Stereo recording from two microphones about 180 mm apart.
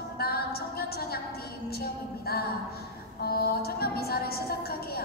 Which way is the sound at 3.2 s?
60° left (ahead or behind).